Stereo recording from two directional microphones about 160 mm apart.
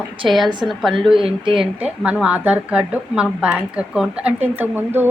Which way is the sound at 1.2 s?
30° right (ahead or behind).